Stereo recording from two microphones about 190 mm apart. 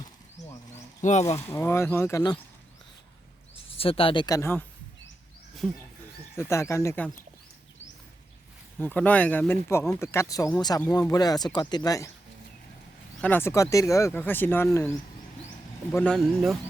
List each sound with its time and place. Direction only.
1.0 s speech: 35° left (ahead or behind)
1.4 s speech: 10° left (ahead or behind)
3.5 s speech: 30° left (ahead or behind); by 4.6 s 15° left (ahead or behind)
5.6 s speech: centre (ahead or behind)
6.3 s speech: 15° left (ahead or behind)
8.8 s speech: 10° left (ahead or behind)
13.2 s speech: 10° left (ahead or behind)